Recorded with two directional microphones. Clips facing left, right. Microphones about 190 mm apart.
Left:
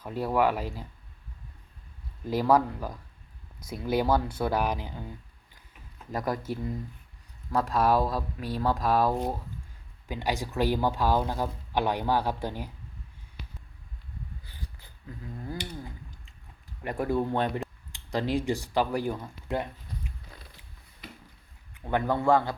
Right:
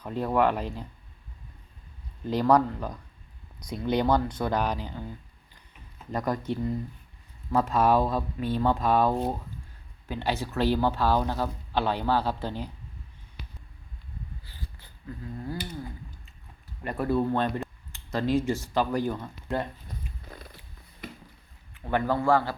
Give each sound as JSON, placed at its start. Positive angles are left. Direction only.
{"t": 0.0, "sound": "speech", "side_deg": 5}
{"t": 2.2, "sound": "speech", "side_deg": 5}
{"t": 6.1, "sound": "speech", "side_deg": 5}
{"t": 10.1, "sound": "speech", "side_deg": 10}
{"t": 16.8, "sound": "speech", "side_deg": 15}
{"t": 21.0, "sound": "a sound", "side_deg": -55}
{"t": 21.7, "sound": "speech", "side_deg": 15}